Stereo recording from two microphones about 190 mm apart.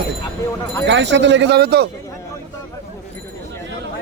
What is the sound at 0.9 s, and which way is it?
Speech, 70° right (ahead or behind).